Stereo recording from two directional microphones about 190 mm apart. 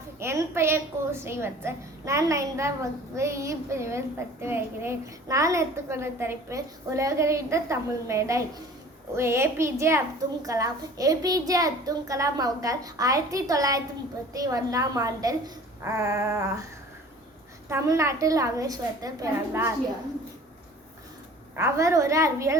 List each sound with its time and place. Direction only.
0.2 s a woman's voice: 15° right (ahead or behind)
17.7 s a woman's voice: 15° right (ahead or behind)
21.5 s a woman's voice: 15° right (ahead or behind)